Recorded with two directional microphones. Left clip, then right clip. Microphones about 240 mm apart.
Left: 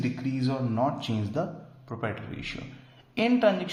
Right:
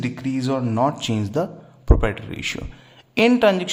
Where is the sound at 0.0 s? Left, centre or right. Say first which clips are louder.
Right 5 dB; right.